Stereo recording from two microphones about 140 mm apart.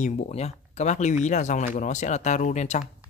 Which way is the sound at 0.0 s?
60° left (ahead or behind).